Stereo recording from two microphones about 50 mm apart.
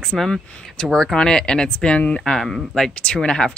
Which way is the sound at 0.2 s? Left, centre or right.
Centre.